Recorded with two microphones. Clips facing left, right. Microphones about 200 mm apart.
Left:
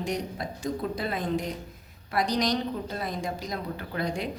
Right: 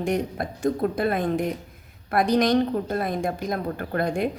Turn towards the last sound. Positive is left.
turn(degrees=-55)  # may be behind; listen again after turning